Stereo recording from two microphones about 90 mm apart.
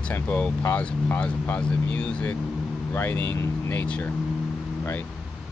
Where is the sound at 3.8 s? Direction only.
15° left (ahead or behind).